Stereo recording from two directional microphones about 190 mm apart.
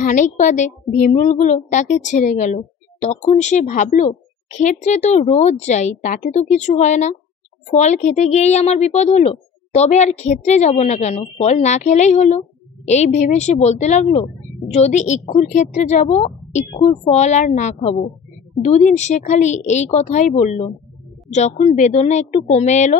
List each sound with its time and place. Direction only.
0.0 s speech: 40° left (ahead or behind)